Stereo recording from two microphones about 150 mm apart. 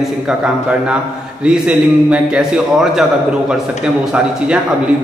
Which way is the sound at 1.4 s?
5° right (ahead or behind).